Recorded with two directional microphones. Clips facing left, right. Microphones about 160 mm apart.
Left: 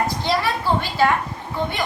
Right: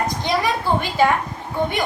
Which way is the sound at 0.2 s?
15° right (ahead or behind).